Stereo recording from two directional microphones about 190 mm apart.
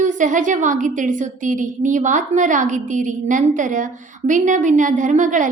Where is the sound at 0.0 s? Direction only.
40° right (ahead or behind).